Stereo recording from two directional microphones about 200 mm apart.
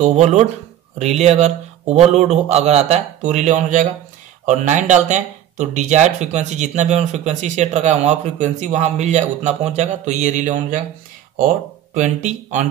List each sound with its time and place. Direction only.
0.0 s speech: 35° right (ahead or behind)